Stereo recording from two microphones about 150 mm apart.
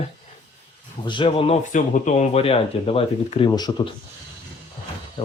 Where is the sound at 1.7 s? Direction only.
55° left (ahead or behind); by 3.5 s 40° left (ahead or behind).